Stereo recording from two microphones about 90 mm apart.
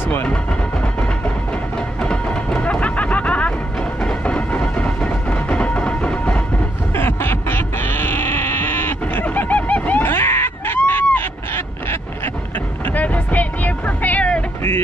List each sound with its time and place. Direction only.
0.1 s speech: 20° left (ahead or behind)
2.0 s music: 10° left (ahead or behind)
4.0 s train: 10° left (ahead or behind)
6.9 s bleat: 25° left (ahead or behind)
12.5 s music: 20° left (ahead or behind)